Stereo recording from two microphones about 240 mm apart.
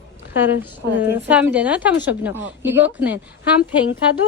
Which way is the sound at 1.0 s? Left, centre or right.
Centre.